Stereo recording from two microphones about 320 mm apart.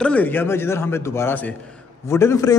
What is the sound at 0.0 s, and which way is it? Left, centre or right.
A man's voice, centre.